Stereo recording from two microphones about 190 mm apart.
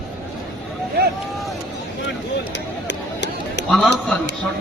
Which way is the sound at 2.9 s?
70° left (ahead or behind).